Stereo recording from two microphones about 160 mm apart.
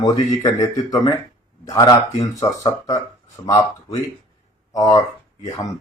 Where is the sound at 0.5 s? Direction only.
20° left (ahead or behind).